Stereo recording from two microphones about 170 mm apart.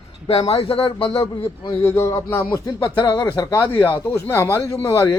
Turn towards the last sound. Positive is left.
turn(degrees=15)  # may be behind; listen again after turning